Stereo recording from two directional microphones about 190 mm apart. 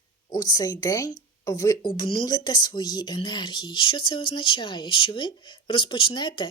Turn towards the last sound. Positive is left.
turn(degrees=25)  # may be behind; listen again after turning